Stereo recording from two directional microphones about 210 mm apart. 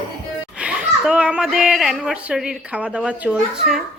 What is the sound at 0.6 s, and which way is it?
Speech, 5° right (ahead or behind).